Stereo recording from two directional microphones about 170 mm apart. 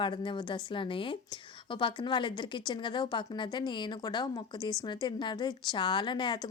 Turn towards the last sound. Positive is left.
turn(degrees=25)  # may be behind; listen again after turning